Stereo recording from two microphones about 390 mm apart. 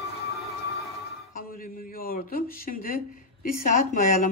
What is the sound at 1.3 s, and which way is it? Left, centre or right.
A man's voice, left.